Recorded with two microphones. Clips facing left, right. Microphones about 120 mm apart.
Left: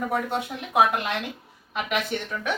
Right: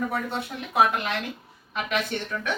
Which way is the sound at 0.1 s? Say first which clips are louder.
Left 3 dB; 15° left (ahead or behind).